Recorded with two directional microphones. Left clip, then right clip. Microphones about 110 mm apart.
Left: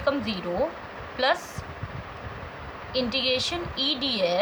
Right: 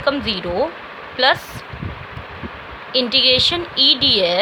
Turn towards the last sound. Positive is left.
turn(degrees=-55)  # may be behind; listen again after turning